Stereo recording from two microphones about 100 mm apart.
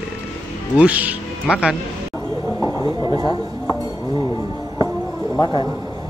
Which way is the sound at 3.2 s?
40° left (ahead or behind).